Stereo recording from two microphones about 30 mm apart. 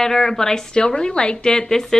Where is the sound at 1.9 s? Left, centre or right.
Centre.